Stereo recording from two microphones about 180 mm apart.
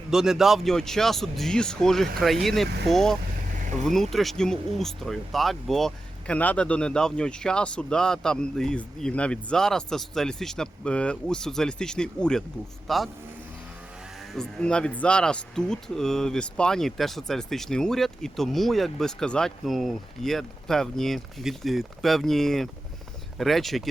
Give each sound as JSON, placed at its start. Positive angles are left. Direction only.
{"t": 0.1, "sound": "speech", "side_deg": -5}
{"t": 3.6, "sound": "vehicle", "side_deg": -45}
{"t": 4.1, "sound": "speech", "side_deg": 0}
{"t": 14.2, "sound": "speech", "side_deg": 5}